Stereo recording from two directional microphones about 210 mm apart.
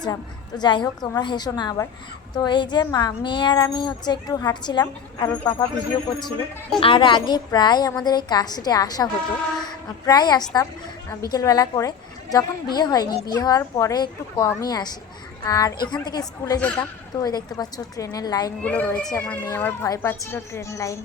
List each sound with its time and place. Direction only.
0.0 s a woman's voice: 20° left (ahead or behind)
6.7 s a woman's voice: 25° left (ahead or behind)
18.6 s speech: 5° left (ahead or behind)